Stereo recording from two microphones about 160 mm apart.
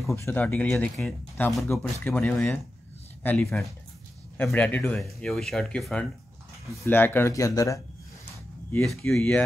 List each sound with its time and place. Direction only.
0.1 s speech: 15° left (ahead or behind)
8.8 s speech: centre (ahead or behind)